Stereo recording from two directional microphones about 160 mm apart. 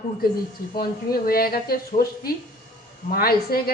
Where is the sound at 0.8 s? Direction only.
65° left (ahead or behind).